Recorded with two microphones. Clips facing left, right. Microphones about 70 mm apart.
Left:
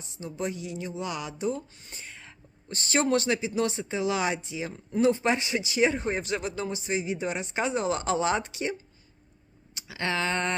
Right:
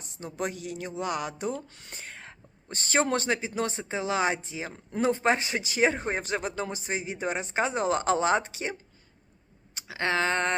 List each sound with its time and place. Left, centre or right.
0.0 s speech: right
3.0 s speech: right
9.7 s a sound: right